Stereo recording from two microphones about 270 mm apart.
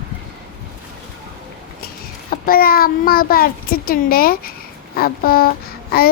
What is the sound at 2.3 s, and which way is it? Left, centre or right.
A child's voice, left.